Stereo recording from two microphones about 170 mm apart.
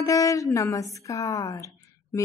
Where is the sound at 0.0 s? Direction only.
20° left (ahead or behind).